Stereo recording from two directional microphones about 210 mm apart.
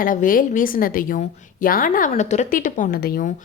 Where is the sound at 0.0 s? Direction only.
40° left (ahead or behind).